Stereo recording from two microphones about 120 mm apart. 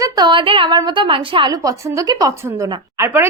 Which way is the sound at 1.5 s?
30° right (ahead or behind).